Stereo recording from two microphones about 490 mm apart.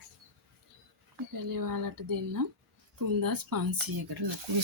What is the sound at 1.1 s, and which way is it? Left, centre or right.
Speech, right.